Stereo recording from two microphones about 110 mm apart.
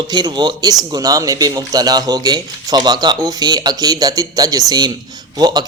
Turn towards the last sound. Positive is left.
turn(degrees=-40)  # may be behind; listen again after turning